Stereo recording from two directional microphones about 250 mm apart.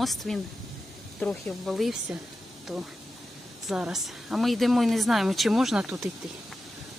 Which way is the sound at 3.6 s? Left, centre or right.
Centre.